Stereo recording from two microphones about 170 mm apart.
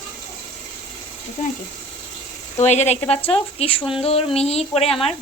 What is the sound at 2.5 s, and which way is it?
Speech, 40° left (ahead or behind).